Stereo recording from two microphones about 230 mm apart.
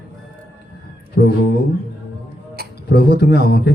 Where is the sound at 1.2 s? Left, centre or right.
Left.